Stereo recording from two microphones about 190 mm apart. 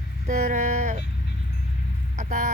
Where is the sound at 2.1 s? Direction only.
40° right (ahead or behind).